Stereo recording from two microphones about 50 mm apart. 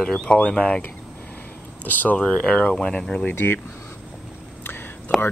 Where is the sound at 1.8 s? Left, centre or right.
Left.